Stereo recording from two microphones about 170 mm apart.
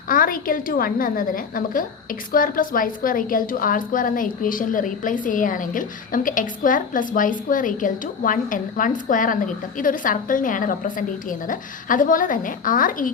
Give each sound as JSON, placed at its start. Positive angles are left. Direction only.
{"t": 0.1, "sound": "a woman's voice", "side_deg": 55}